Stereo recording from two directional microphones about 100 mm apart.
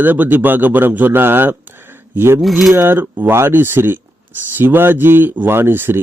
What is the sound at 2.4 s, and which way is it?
Coin, centre (ahead or behind).